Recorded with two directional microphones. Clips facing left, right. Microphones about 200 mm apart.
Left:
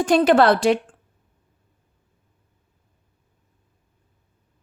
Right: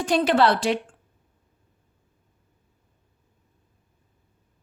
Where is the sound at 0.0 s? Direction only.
50° left (ahead or behind).